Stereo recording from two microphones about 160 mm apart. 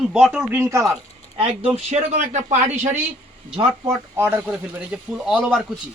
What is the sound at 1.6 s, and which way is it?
Speech, 40° right (ahead or behind).